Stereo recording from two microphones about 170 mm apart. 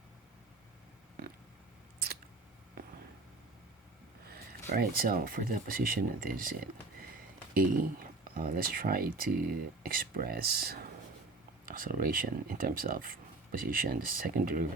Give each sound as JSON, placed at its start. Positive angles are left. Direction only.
{"t": 4.3, "sound": "speech", "side_deg": -65}